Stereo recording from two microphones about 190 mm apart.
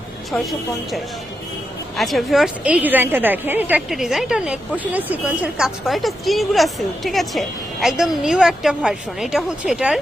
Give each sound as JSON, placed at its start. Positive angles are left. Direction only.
{"t": 2.0, "sound": "a woman's voice", "side_deg": 0}